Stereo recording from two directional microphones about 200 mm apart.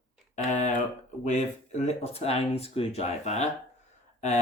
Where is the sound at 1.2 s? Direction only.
35° left (ahead or behind).